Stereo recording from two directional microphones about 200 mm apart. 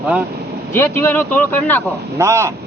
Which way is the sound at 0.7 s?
10° left (ahead or behind).